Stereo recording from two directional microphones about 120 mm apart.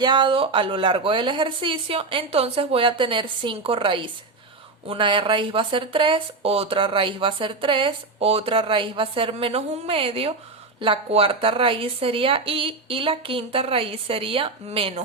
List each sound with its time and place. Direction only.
0.0 s speech: 40° right (ahead or behind)